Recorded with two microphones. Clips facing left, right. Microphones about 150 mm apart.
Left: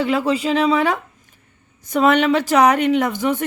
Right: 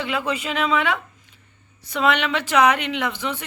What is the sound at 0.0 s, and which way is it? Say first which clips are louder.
A woman's voice: left 7 dB; 40° left (ahead or behind).